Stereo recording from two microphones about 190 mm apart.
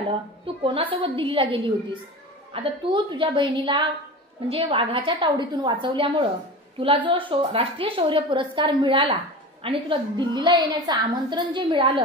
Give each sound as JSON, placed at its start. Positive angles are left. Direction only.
{"t": 0.7, "sound": "a woman's voice", "side_deg": -25}